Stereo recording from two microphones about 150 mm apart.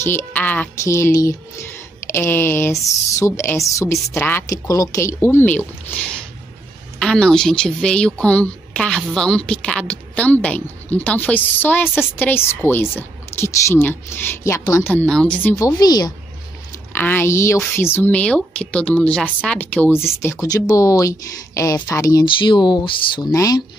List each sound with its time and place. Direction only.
0.0 s speech: 15° left (ahead or behind)
15.0 s speech: 5° left (ahead or behind)
15.6 s speech: 25° left (ahead or behind)
16.9 s speech: 15° left (ahead or behind); by 23.2 s 35° left (ahead or behind)
23.3 s speech: 20° left (ahead or behind)